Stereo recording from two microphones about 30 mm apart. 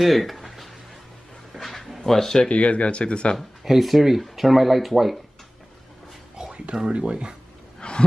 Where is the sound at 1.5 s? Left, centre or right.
Centre.